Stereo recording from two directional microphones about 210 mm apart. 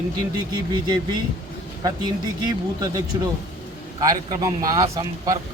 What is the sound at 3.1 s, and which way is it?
A man's voice, 20° right (ahead or behind).